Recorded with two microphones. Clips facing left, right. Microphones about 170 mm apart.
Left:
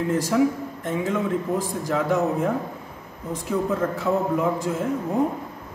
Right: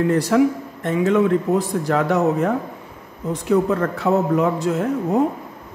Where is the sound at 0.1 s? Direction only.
70° right (ahead or behind).